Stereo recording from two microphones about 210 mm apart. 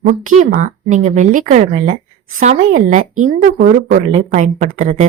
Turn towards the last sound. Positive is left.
turn(degrees=-35)  # may be behind; listen again after turning